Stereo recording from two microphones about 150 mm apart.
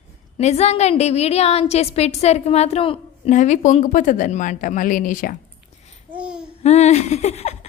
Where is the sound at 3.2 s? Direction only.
55° left (ahead or behind).